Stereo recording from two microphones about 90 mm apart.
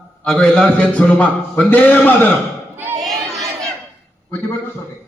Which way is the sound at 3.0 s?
Centre (ahead or behind).